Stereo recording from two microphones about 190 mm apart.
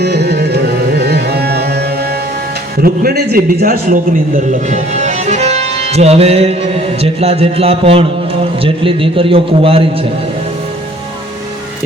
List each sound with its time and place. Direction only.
0.0 s music: 60° right (ahead or behind)
2.8 s a man's voice: 50° right (ahead or behind)
4.7 s music: 35° right (ahead or behind)
7.0 s a man's voice: 30° right (ahead or behind)